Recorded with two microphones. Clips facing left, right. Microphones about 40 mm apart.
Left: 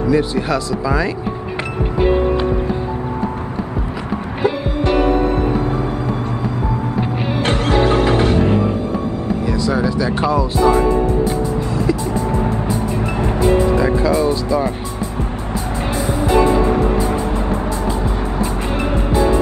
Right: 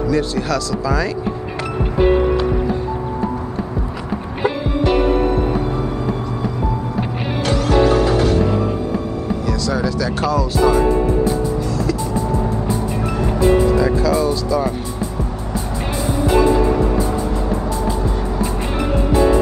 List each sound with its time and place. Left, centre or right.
0.1 s speech: centre
7.4 s music: left
9.5 s speech: centre
11.7 s vehicle: left
13.1 s music: left
16.7 s music: left